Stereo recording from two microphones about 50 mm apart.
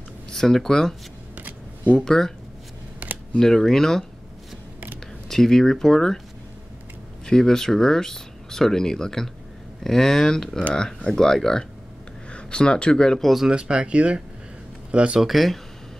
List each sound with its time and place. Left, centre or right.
0.3 s speech: centre
2.0 s speech: centre
3.0 s camera: right
3.3 s speech: centre
5.3 s speech: centre
7.2 s speech: centre
12.3 s speech: left
13.5 s speech: centre
15.1 s speech: centre